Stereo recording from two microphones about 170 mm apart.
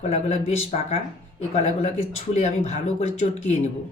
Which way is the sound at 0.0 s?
40° left (ahead or behind).